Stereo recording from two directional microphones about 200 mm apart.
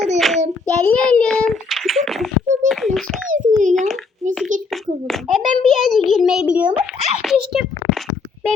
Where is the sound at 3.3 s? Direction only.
40° right (ahead or behind).